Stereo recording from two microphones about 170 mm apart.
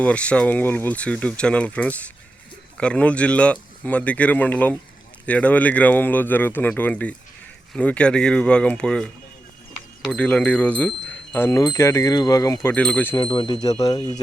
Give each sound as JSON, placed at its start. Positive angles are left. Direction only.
{"t": 0.0, "sound": "speech", "side_deg": 5}
{"t": 12.7, "sound": "speech", "side_deg": 5}
{"t": 13.1, "sound": "speech", "side_deg": 30}